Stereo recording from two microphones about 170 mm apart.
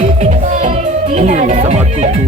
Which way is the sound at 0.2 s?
45° right (ahead or behind).